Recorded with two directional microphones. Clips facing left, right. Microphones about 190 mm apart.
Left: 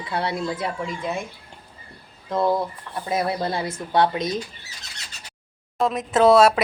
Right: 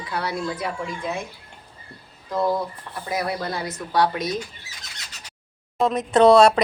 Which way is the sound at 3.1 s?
25° left (ahead or behind).